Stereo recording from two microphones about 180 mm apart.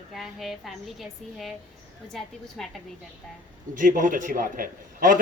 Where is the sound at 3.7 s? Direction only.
45° right (ahead or behind).